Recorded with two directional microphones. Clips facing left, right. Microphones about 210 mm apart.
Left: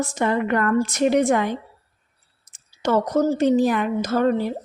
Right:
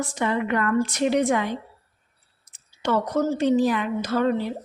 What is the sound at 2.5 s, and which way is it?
A woman's voice, 45° left (ahead or behind).